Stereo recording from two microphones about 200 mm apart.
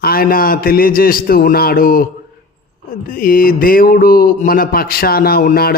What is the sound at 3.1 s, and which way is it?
A man's voice, 45° left (ahead or behind).